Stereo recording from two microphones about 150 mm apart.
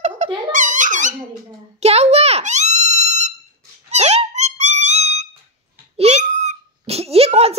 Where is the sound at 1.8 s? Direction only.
45° right (ahead or behind).